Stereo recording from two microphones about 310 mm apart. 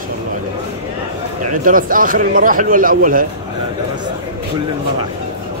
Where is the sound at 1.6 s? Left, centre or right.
Right.